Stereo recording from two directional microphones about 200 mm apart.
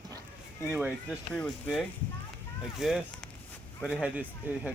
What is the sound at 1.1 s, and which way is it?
Speech, 5° left (ahead or behind).